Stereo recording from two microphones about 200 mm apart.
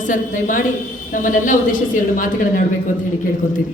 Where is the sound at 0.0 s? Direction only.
40° left (ahead or behind).